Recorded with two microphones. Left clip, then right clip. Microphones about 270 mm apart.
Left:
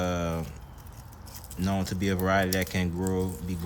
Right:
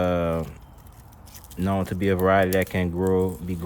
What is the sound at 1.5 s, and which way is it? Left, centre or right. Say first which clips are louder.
Speech: right 5 dB; centre.